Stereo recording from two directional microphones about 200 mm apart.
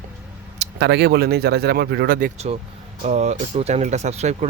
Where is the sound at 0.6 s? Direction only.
55° right (ahead or behind).